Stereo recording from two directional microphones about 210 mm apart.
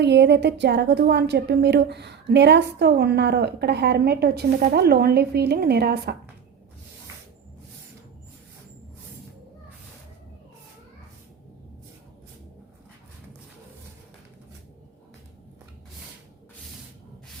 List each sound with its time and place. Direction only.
0.0 s a woman's voice: 55° right (ahead or behind)